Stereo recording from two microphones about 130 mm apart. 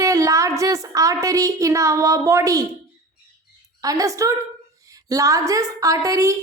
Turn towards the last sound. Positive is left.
turn(degrees=-25)  # may be behind; listen again after turning